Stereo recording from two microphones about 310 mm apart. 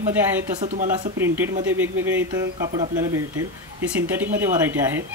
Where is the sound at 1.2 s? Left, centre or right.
Centre.